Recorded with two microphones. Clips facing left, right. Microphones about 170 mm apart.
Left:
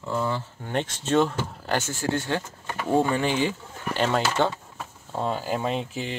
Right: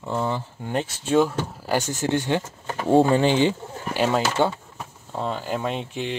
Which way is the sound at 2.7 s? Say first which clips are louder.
Right 5 dB; 30° right (ahead or behind).